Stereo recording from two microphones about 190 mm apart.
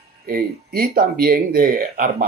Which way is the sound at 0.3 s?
50° right (ahead or behind).